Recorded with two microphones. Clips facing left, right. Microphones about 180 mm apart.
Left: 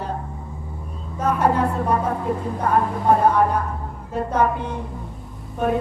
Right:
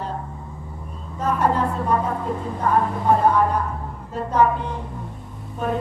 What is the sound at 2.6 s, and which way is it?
Speech, 45° left (ahead or behind).